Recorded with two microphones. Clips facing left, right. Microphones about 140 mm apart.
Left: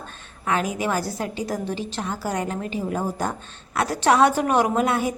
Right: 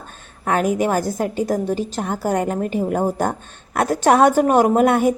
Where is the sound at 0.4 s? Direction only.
50° right (ahead or behind).